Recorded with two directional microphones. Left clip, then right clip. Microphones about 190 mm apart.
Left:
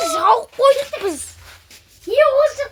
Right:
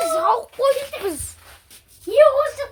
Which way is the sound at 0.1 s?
20° left (ahead or behind).